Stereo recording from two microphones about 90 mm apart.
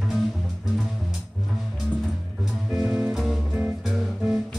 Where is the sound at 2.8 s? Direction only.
20° right (ahead or behind).